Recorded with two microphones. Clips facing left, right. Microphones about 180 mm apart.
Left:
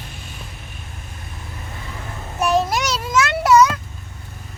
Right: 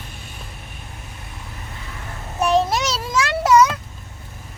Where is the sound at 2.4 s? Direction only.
25° right (ahead or behind).